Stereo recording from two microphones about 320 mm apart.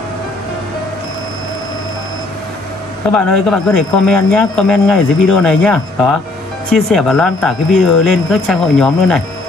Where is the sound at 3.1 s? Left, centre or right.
Centre.